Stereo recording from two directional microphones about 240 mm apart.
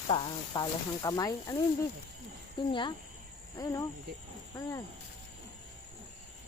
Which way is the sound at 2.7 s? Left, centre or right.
Centre.